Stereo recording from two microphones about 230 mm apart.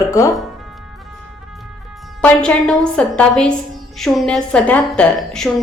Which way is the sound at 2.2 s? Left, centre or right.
Centre.